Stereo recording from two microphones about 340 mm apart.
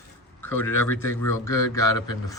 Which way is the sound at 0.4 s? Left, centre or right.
Centre.